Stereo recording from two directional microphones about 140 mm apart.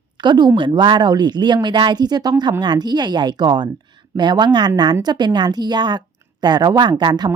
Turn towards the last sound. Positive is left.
turn(degrees=-30)  # may be behind; listen again after turning